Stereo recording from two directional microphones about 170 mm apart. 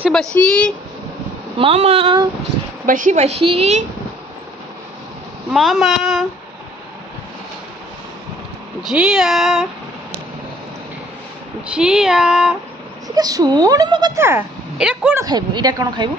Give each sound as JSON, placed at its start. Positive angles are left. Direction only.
{"t": 0.1, "sound": "speech", "side_deg": 5}
{"t": 1.6, "sound": "a woman's voice", "side_deg": -35}
{"t": 2.9, "sound": "a woman's voice", "side_deg": -45}
{"t": 5.5, "sound": "speech", "side_deg": 0}
{"t": 8.8, "sound": "speech", "side_deg": -5}
{"t": 11.6, "sound": "speech", "side_deg": -5}
{"t": 13.1, "sound": "a woman's voice", "side_deg": -20}
{"t": 14.2, "sound": "speech", "side_deg": -10}
{"t": 15.1, "sound": "a woman's voice", "side_deg": -25}